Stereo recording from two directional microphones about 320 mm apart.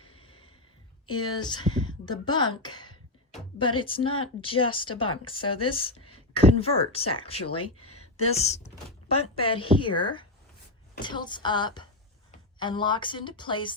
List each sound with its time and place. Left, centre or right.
0.2 s snort: centre
1.0 s speech: centre
2.6 s a sound: centre
4.0 s speech: left
4.4 s speech: centre
7.4 s speech: left
8.1 s speech: centre